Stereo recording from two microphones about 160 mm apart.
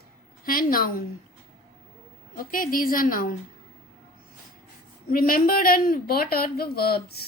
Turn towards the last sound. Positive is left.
turn(degrees=80)